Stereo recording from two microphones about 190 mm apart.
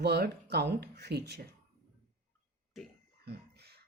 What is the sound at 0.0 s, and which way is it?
Speech, 60° right (ahead or behind).